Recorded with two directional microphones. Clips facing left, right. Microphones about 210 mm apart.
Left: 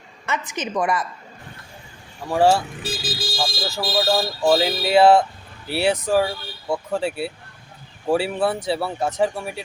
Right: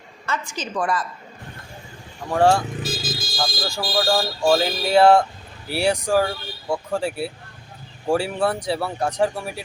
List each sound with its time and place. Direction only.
0.3 s a woman's voice: 20° left (ahead or behind)
2.3 s speech: 5° left (ahead or behind)
2.8 s car alarm: 35° left (ahead or behind)
3.8 s a woman's voice: 25° left (ahead or behind)
4.4 s speech: 5° left (ahead or behind)